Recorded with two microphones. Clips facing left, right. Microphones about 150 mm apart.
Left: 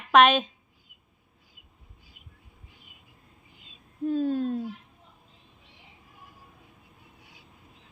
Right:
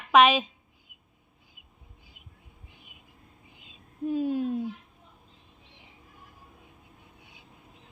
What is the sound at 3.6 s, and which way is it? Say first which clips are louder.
Owl: left 2 dB; 15° right (ahead or behind).